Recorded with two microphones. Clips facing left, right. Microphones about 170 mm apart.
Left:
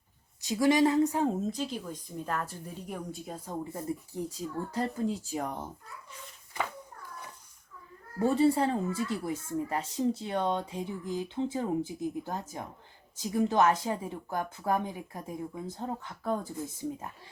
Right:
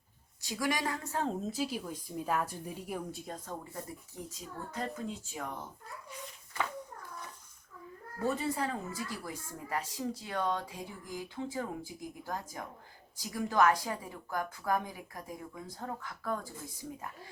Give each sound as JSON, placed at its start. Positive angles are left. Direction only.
{"t": 0.4, "sound": "speech", "side_deg": 25}
{"t": 1.4, "sound": "speech", "side_deg": -5}
{"t": 4.3, "sound": "speech", "side_deg": 35}
{"t": 8.2, "sound": "speech", "side_deg": 30}